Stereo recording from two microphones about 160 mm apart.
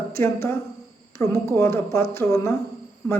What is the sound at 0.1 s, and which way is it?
Speech, 15° left (ahead or behind).